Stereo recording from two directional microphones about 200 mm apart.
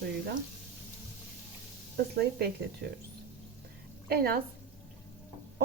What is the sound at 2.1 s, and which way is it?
Speech, 55° right (ahead or behind).